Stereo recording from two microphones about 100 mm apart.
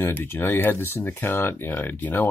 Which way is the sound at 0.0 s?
20° left (ahead or behind).